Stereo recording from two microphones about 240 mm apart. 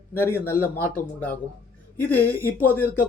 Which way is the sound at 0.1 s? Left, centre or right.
Centre.